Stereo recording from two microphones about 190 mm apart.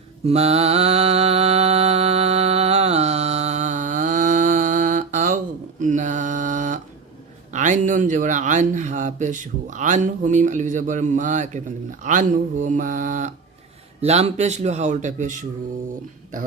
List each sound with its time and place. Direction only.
0.3 s mantra: 35° right (ahead or behind)
7.5 s speech: 40° right (ahead or behind)